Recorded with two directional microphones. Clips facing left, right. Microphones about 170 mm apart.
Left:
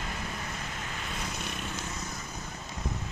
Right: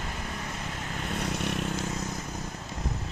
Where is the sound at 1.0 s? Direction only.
60° right (ahead or behind).